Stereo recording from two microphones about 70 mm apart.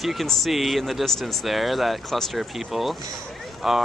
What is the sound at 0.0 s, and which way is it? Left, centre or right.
Speech, centre.